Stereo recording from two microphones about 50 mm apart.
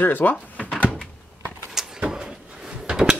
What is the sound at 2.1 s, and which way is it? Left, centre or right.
Drawer open or close, centre.